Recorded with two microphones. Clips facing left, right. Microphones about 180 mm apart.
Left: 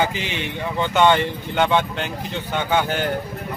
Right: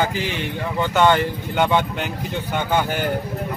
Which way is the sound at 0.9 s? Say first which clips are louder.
Even; 10° right (ahead or behind).